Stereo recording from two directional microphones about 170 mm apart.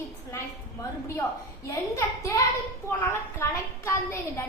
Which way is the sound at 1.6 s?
20° left (ahead or behind).